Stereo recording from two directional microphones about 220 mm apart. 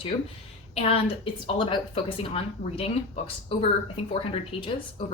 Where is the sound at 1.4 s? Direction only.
20° left (ahead or behind).